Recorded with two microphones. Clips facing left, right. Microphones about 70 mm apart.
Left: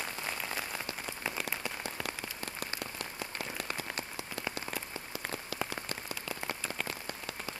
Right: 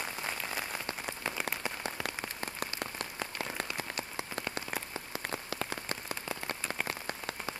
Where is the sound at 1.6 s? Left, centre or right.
Right.